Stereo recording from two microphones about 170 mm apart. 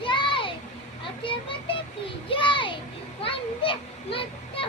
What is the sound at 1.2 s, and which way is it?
Children playing, 30° left (ahead or behind).